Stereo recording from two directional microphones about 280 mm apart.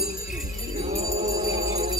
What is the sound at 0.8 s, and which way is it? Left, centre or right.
Music, right.